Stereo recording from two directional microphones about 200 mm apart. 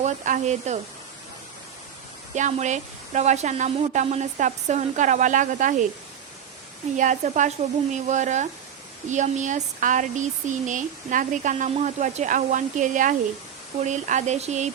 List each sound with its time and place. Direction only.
0.0 s speech: 35° right (ahead or behind)
2.3 s speech: 35° right (ahead or behind)
6.9 s speech: 40° right (ahead or behind)